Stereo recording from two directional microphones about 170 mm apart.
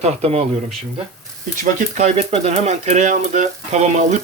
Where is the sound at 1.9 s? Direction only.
45° right (ahead or behind).